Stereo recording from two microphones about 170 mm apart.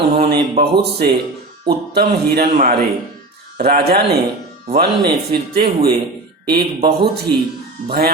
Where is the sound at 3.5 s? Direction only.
65° right (ahead or behind).